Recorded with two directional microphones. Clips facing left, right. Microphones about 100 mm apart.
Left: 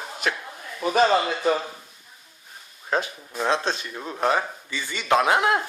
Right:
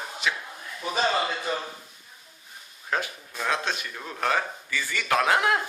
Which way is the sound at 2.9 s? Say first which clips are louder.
Left 4 dB; 25° left (ahead or behind).